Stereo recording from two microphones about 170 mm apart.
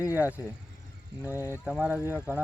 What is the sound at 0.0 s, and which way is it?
Speech, 10° right (ahead or behind).